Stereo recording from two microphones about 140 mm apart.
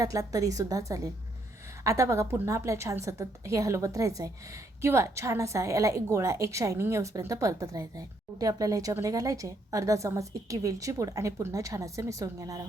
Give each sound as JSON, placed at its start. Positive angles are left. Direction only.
{"t": 0.0, "sound": "a woman's voice", "side_deg": -25}